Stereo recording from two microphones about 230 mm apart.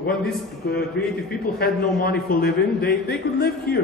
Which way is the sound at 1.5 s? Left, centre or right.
Left.